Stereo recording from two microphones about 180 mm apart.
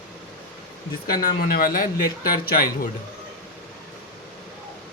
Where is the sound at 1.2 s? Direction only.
55° left (ahead or behind).